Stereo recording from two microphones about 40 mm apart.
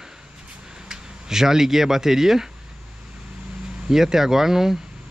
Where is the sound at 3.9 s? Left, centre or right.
Centre.